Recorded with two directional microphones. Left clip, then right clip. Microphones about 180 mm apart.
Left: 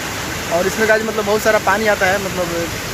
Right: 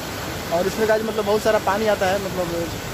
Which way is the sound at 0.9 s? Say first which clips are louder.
Left 4 dB; 5° left (ahead or behind).